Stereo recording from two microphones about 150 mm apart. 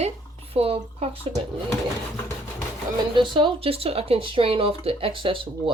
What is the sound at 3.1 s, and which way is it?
Speech, 35° right (ahead or behind).